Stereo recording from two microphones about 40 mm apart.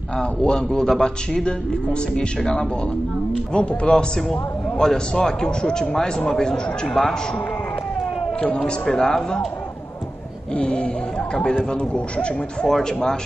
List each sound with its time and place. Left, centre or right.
0.2 s a man's voice: left
0.7 s speech: centre
1.3 s a man's voice: left
3.9 s a man's voice: centre
8.5 s a man's voice: centre
10.5 s speech: left
12.6 s speech: centre